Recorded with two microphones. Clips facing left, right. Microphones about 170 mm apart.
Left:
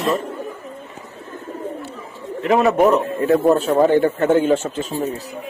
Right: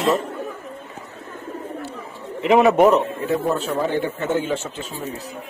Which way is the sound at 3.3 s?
60° left (ahead or behind).